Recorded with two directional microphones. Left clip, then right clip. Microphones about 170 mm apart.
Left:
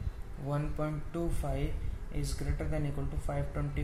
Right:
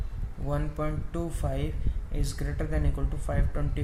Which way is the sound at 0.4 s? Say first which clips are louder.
Right 4 dB; 35° right (ahead or behind).